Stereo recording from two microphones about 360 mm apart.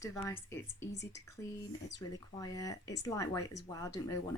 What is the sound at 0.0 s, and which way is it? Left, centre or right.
Speech, centre.